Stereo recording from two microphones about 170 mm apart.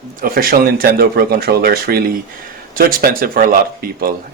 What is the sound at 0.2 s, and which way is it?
Speech, 55° right (ahead or behind).